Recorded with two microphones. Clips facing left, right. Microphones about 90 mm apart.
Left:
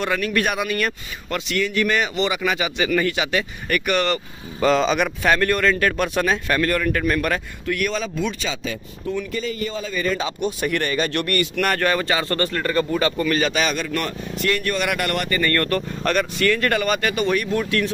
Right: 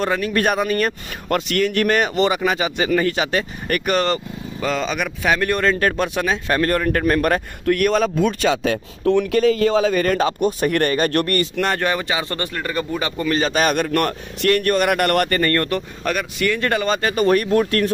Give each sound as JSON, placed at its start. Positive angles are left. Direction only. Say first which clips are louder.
{"t": 0.0, "sound": "speech", "louder": "right 2 dB", "side_deg": -30}
{"t": 1.5, "sound": "speech", "louder": "right 2 dB", "side_deg": -50}
{"t": 4.6, "sound": "speech", "louder": "left 5 dB", "side_deg": 0}
{"t": 5.3, "sound": "speech", "louder": "even", "side_deg": -15}
{"t": 5.6, "sound": "speech", "louder": "right 1 dB", "side_deg": -35}
{"t": 6.0, "sound": "a man's voice", "louder": "even", "side_deg": -15}
{"t": 10.0, "sound": "a man's voice", "louder": "right 5 dB", "side_deg": -50}
{"t": 11.6, "sound": "speech", "louder": "even", "side_deg": -20}
{"t": 13.5, "sound": "a man's voice", "louder": "right 4 dB", "side_deg": -50}
{"t": 15.5, "sound": "speech", "louder": "right 1 dB", "side_deg": -20}
{"t": 16.0, "sound": "speech", "louder": "left 3 dB", "side_deg": -5}